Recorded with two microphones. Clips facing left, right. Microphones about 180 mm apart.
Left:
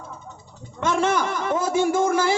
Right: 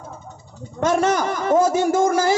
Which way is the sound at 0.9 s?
45° right (ahead or behind).